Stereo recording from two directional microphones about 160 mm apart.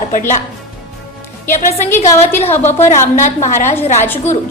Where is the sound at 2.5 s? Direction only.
15° left (ahead or behind).